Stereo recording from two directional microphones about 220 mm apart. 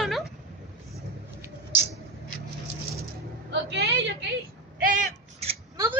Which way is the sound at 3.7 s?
50° right (ahead or behind).